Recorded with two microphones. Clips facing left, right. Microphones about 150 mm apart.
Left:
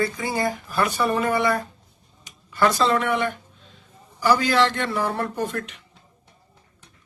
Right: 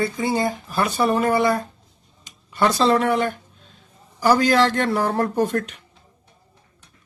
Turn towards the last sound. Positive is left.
turn(degrees=-40)  # may be behind; listen again after turning